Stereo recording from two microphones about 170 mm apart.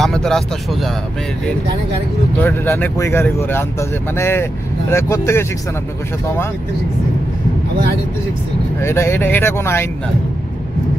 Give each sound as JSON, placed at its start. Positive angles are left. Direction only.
{"t": 0.0, "sound": "speech", "side_deg": 5}
{"t": 2.4, "sound": "speech", "side_deg": 10}
{"t": 8.8, "sound": "speech", "side_deg": 15}